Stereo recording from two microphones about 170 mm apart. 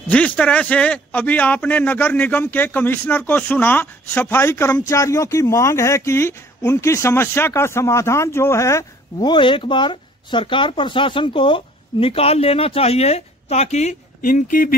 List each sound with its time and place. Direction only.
0.1 s a man's voice: 5° left (ahead or behind); by 14.8 s 55° left (ahead or behind)